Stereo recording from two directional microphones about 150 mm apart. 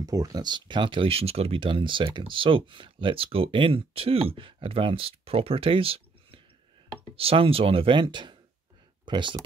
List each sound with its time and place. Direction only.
0.0 s speech: 25° right (ahead or behind)